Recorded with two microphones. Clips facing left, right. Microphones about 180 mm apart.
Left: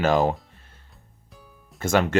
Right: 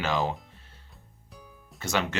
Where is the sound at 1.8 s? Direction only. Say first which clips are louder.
Left 9 dB; 50° left (ahead or behind).